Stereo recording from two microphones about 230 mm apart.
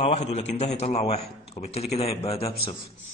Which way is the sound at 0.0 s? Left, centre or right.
Left.